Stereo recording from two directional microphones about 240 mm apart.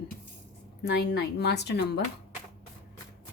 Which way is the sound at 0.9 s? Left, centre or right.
Left.